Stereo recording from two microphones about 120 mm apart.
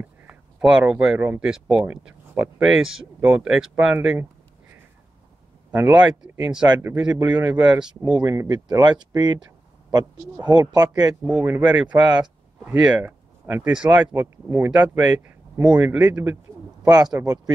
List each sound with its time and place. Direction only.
0.0 s speech: 10° right (ahead or behind)
5.7 s speech: 15° right (ahead or behind)
8.0 s speech: 35° right (ahead or behind)
11.2 s speech: 5° right (ahead or behind)
16.8 s speech: 30° right (ahead or behind)